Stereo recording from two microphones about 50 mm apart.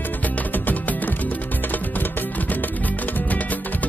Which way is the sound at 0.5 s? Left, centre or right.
Left.